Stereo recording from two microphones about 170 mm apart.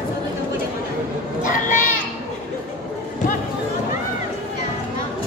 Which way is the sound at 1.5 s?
50° left (ahead or behind).